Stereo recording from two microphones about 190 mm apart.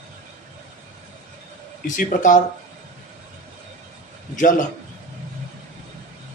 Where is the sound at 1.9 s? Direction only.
45° left (ahead or behind).